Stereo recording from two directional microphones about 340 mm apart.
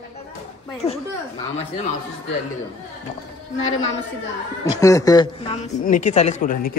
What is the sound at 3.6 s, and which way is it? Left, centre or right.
Speech, left.